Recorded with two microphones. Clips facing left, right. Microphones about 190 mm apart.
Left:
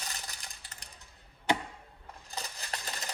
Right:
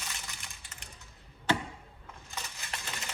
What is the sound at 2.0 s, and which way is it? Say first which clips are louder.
Coin: left 2 dB; 35° left (ahead or behind).